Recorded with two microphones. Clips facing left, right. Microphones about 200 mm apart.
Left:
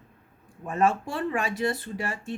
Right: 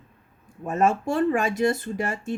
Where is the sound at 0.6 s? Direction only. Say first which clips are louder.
Right 2 dB; 45° right (ahead or behind).